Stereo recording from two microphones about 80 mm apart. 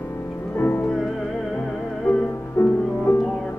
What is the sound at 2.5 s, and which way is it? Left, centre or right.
Music, left.